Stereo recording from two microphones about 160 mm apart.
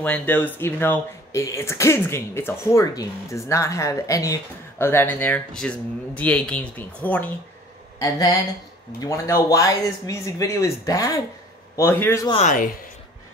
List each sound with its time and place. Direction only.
0.0 s speech: 10° left (ahead or behind)
8.0 s speech: 20° left (ahead or behind)